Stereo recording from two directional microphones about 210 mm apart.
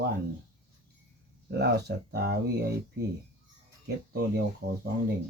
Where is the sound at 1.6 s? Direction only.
50° right (ahead or behind).